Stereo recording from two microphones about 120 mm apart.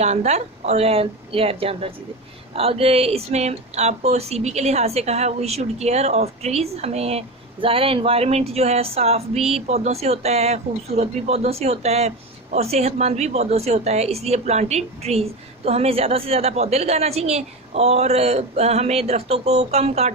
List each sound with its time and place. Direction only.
0.0 s speech: 70° right (ahead or behind)